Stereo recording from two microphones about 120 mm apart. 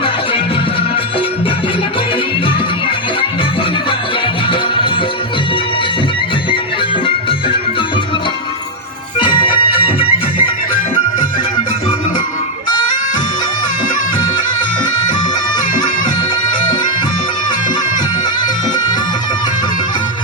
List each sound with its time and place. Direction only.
9.1 s music: 40° left (ahead or behind)
11.2 s music: 40° left (ahead or behind)